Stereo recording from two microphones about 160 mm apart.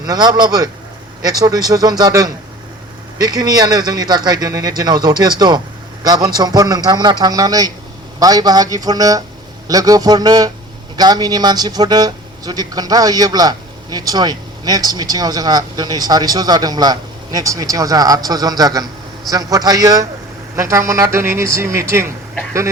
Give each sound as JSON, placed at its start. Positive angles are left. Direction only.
{"t": 0.0, "sound": "speech", "side_deg": -25}